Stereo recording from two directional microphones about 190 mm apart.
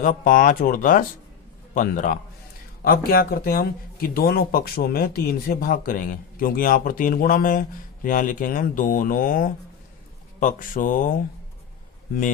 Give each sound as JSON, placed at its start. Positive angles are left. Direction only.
{"t": 0.0, "sound": "speech", "side_deg": 45}